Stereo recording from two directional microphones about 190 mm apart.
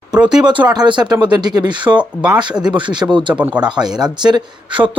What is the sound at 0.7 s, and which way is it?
Speech, 20° right (ahead or behind).